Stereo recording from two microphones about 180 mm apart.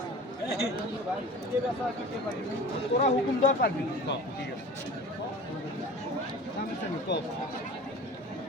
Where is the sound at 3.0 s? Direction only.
50° left (ahead or behind).